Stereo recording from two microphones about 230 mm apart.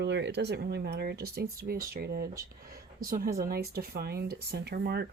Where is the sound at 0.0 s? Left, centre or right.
Right.